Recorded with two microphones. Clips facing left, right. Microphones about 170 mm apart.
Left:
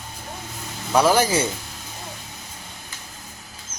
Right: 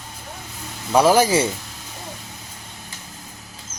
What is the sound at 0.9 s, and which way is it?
Speech, 10° right (ahead or behind).